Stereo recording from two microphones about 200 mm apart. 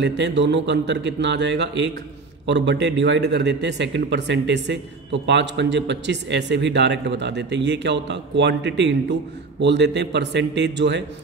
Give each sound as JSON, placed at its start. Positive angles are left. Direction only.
{"t": 0.0, "sound": "a man's voice", "side_deg": -60}